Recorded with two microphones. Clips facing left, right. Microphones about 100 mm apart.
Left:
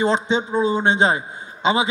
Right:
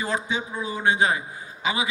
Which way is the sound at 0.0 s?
25° left (ahead or behind).